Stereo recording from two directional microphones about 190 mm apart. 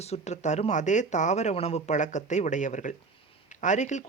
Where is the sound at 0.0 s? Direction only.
35° left (ahead or behind).